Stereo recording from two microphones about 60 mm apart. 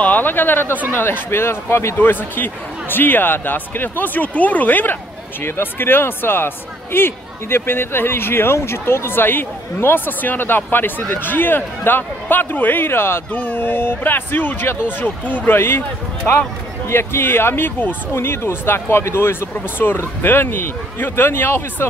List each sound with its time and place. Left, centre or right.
0.0 s speech: left
2.0 s speech: left
13.3 s speech: left
15.5 s speech: left
16.9 s speech: left
18.1 s speech: left